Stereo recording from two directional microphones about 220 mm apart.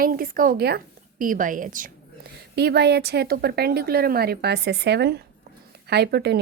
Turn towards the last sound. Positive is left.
turn(degrees=-50)  # may be behind; listen again after turning